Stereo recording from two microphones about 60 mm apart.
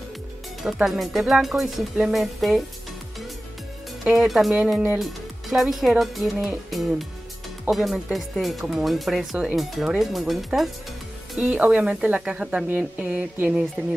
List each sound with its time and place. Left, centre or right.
0.8 s speech: centre
4.0 s speech: centre
11.4 s speech: right
13.5 s speech: centre